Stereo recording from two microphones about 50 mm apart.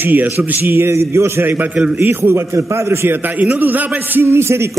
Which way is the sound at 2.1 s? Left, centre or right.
Right.